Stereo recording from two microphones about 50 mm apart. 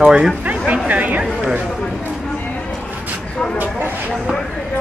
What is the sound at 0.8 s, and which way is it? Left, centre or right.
Speech, right.